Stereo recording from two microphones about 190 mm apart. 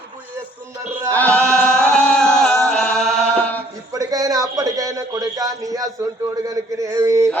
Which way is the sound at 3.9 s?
20° right (ahead or behind).